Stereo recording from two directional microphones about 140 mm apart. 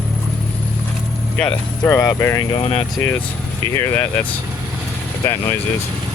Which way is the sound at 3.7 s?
20° left (ahead or behind).